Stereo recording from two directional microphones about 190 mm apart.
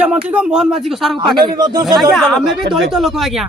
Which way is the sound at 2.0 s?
Centre (ahead or behind).